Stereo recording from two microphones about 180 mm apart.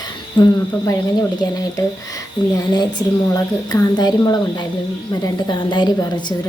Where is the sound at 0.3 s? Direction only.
25° left (ahead or behind).